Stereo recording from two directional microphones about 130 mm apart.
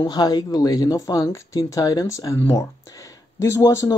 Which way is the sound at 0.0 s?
30° left (ahead or behind).